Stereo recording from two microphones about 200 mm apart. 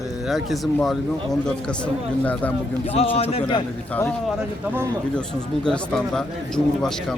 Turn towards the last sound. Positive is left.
turn(degrees=5)  # may be behind; listen again after turning